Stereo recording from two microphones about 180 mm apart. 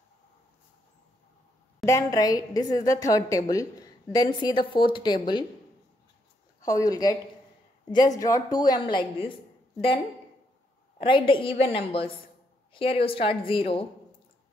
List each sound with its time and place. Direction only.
1.9 s a woman's voice: 20° left (ahead or behind)
6.6 s a woman's voice: 20° left (ahead or behind)
11.0 s a woman's voice: 30° left (ahead or behind)